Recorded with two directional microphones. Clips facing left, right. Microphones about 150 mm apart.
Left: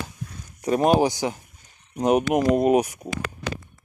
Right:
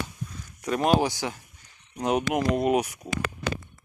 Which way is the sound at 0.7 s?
30° left (ahead or behind).